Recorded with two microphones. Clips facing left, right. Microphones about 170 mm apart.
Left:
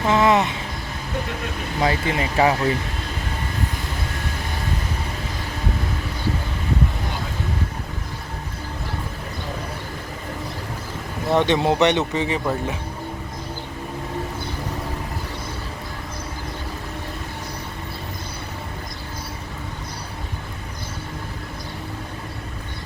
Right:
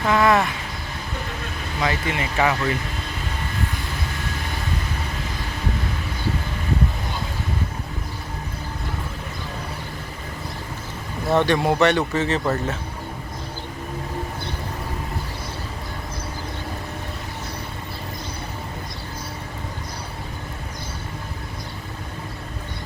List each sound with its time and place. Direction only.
0.0 s vehicle: 20° left (ahead or behind)
1.8 s speech: 30° left (ahead or behind)
11.3 s speech: 20° left (ahead or behind)